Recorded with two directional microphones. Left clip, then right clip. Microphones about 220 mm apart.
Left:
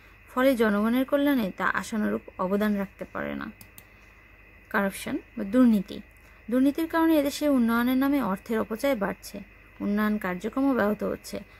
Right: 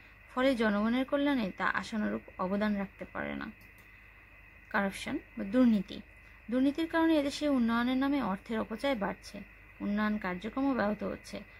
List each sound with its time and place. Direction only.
0.3 s speech: 20° left (ahead or behind)
4.6 s speech: 15° left (ahead or behind)